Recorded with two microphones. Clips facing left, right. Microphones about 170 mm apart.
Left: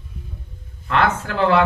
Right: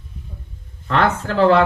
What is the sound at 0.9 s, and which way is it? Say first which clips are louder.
Speech: right 1 dB; 35° right (ahead or behind).